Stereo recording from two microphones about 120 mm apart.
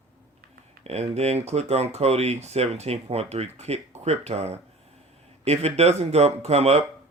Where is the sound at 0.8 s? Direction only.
60° right (ahead or behind).